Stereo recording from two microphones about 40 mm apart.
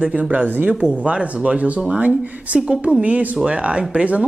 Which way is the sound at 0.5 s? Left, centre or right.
Right.